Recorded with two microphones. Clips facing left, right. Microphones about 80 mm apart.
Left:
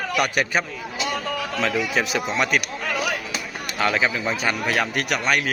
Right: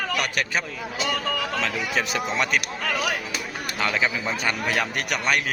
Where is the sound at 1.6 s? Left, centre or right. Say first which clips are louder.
Left 3 dB; centre.